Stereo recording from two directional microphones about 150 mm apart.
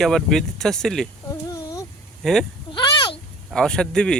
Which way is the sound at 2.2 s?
5° left (ahead or behind).